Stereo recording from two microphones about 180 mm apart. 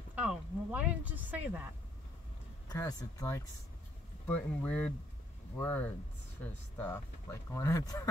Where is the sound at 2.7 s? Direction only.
20° left (ahead or behind).